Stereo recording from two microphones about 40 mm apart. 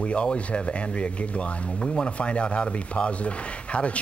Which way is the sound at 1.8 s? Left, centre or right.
Centre.